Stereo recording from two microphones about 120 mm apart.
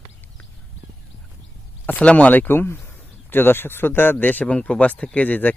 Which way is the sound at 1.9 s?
10° left (ahead or behind).